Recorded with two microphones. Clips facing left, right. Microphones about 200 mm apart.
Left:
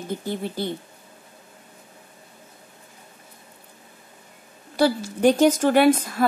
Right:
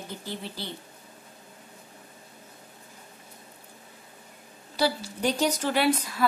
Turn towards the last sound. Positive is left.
turn(degrees=50)  # may be behind; listen again after turning